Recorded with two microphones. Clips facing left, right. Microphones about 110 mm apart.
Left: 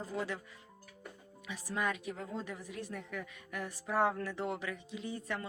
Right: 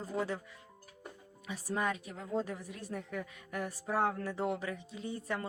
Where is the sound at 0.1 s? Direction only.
30° right (ahead or behind).